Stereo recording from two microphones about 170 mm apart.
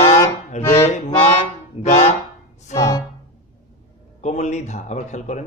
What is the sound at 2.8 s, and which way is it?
Music, 20° left (ahead or behind).